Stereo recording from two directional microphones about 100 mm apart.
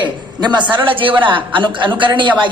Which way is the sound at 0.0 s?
50° right (ahead or behind).